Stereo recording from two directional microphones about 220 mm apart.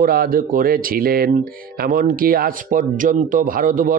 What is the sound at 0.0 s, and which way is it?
Speech, 40° right (ahead or behind).